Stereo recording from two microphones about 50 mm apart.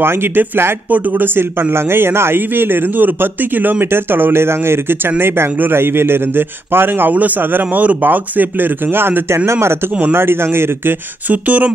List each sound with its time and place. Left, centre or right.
0.0 s a man's voice: right
0.8 s a man's voice: right
9.5 s a man's voice: right
11.2 s speech: right